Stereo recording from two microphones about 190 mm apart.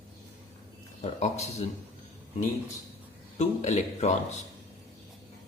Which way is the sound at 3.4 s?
35° left (ahead or behind).